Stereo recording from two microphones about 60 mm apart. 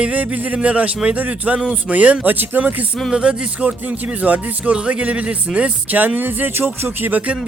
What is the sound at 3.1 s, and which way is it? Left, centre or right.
Speech, centre.